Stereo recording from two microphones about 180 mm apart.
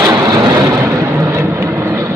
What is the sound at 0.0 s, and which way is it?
Vehicle, 20° right (ahead or behind).